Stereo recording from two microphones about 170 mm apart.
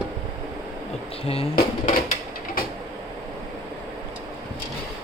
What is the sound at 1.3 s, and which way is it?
Speech, 35° left (ahead or behind).